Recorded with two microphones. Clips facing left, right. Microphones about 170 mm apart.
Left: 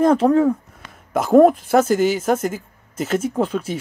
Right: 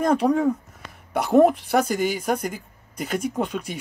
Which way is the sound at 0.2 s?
5° left (ahead or behind).